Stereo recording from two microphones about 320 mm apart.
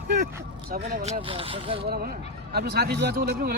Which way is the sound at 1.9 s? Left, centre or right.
Right.